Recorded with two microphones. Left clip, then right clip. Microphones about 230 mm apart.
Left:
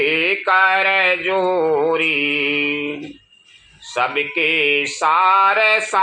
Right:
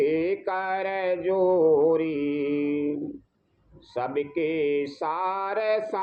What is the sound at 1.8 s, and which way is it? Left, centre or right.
Mantra, left.